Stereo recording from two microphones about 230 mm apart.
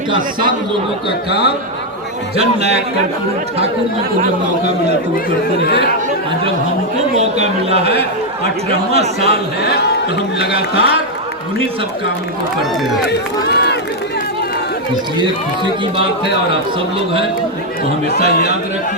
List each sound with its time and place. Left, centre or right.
2.3 s a man's voice: right
7.2 s a man's voice: right
9.6 s speech: left
13.1 s speech: left
18.2 s speech: left